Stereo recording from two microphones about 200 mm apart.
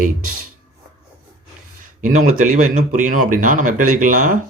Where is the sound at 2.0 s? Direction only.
40° right (ahead or behind).